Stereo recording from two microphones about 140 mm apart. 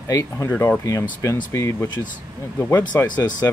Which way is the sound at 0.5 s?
10° left (ahead or behind).